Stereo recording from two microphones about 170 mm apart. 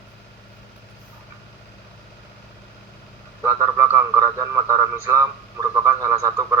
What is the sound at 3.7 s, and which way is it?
A man's voice, 15° right (ahead or behind).